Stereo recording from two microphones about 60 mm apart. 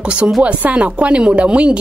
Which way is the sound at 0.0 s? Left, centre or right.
Centre.